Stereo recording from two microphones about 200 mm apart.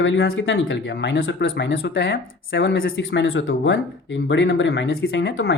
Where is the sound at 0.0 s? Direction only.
60° left (ahead or behind).